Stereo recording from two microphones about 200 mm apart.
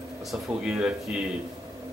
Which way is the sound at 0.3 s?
5° right (ahead or behind).